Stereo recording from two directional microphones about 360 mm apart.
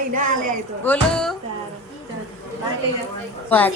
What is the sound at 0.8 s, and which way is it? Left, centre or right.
Speech, centre.